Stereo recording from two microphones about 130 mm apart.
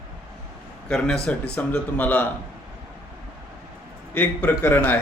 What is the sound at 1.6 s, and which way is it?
Speech, 10° left (ahead or behind).